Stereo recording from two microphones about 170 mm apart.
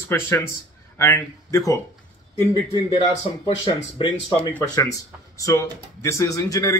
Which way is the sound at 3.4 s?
35° left (ahead or behind).